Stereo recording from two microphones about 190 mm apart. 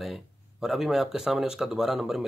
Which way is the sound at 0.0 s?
Centre (ahead or behind).